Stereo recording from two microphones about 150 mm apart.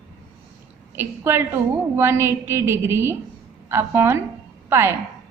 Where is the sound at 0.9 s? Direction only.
15° right (ahead or behind).